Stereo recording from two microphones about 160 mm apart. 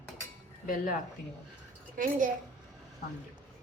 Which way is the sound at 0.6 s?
60° left (ahead or behind).